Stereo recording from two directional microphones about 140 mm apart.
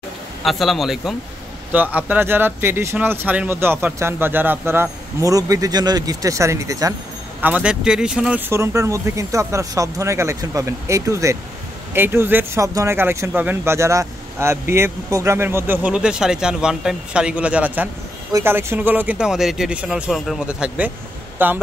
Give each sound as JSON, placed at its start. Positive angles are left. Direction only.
{"t": 0.4, "sound": "speech", "side_deg": 0}
{"t": 7.4, "sound": "speech", "side_deg": -10}
{"t": 8.5, "sound": "speech", "side_deg": -20}